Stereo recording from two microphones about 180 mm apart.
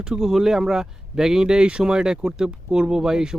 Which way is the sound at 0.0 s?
5° right (ahead or behind).